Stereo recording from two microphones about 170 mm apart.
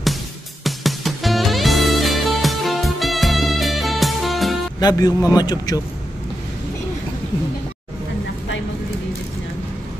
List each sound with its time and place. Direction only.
0.7 s music: centre (ahead or behind)
4.7 s a man's voice: 25° left (ahead or behind)